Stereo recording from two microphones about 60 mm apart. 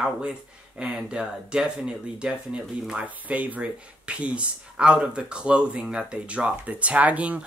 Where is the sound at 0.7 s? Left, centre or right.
Centre.